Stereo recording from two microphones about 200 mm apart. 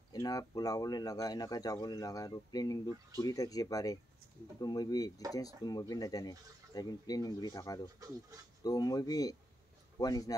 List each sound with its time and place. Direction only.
0.1 s speech: 20° left (ahead or behind)